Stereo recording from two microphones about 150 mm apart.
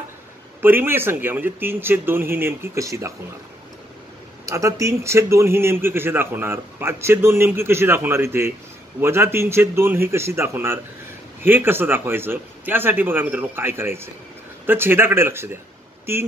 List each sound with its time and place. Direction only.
0.6 s a man's voice: 15° right (ahead or behind)
4.5 s a man's voice: 20° right (ahead or behind)